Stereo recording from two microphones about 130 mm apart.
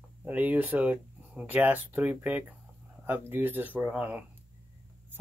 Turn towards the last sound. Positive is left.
turn(degrees=-10)  # may be behind; listen again after turning